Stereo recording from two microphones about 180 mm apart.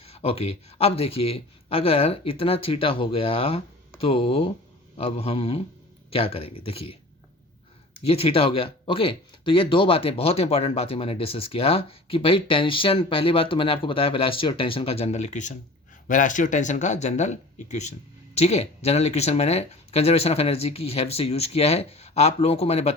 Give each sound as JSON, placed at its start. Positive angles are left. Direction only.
{"t": 0.0, "sound": "speech", "side_deg": 35}
{"t": 8.0, "sound": "speech", "side_deg": 35}